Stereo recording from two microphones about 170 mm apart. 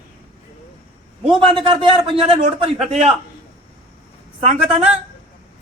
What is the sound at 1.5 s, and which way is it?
Speech, 30° right (ahead or behind).